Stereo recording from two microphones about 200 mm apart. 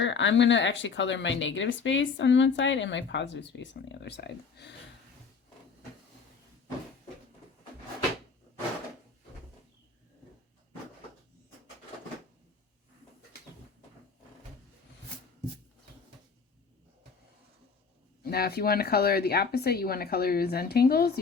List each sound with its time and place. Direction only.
0.0 s speech: 65° left (ahead or behind)
18.2 s speech: 50° left (ahead or behind)